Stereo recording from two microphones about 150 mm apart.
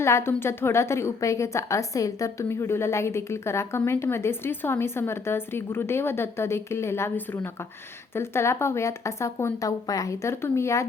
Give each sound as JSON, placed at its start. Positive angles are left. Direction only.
{"t": 0.0, "sound": "a woman's voice", "side_deg": 15}
{"t": 8.1, "sound": "a woman's voice", "side_deg": 15}